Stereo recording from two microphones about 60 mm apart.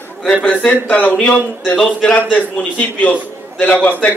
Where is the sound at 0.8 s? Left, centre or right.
Left.